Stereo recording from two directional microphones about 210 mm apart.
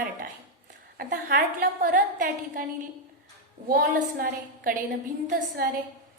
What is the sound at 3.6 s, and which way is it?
Speech, 45° right (ahead or behind).